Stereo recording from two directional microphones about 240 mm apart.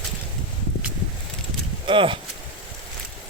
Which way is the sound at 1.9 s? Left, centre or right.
Right.